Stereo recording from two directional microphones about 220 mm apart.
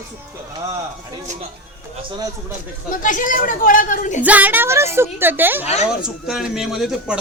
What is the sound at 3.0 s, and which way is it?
Speech, 35° left (ahead or behind).